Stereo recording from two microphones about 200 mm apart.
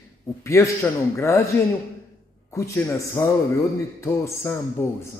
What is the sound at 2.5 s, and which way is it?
A man's voice, 15° left (ahead or behind).